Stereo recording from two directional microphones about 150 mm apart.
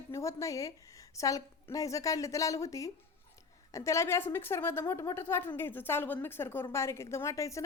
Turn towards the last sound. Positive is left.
turn(degrees=20)  # may be behind; listen again after turning